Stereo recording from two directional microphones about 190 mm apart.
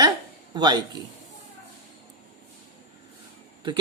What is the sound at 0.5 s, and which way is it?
Speech, 20° right (ahead or behind).